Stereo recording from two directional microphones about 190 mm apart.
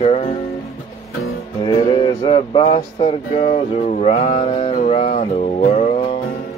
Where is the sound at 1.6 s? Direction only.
25° left (ahead or behind); by 6.0 s 40° left (ahead or behind).